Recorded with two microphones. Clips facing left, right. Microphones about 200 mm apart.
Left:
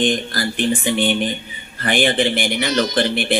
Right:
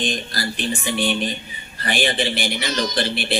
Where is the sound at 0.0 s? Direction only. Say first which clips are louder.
Left 6 dB; 55° left (ahead or behind).